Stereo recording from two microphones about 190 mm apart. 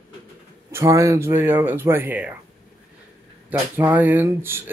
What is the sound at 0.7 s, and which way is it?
A man's voice, 15° right (ahead or behind).